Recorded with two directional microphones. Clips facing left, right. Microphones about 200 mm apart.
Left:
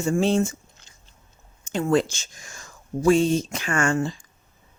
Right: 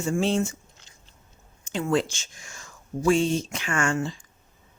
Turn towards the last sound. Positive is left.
turn(degrees=40)  # may be behind; listen again after turning